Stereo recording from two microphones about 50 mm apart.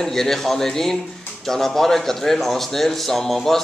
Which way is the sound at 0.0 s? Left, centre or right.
Centre.